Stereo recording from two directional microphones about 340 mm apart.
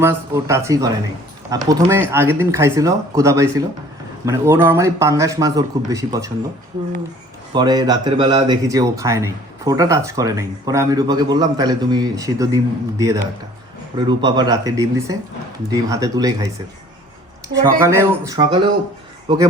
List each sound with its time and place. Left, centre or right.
0.0 s speech: centre
7.5 s speech: centre
17.5 s speech: centre